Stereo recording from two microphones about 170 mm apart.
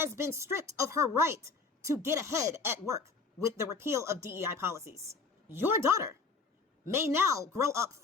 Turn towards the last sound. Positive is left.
turn(degrees=-15)  # may be behind; listen again after turning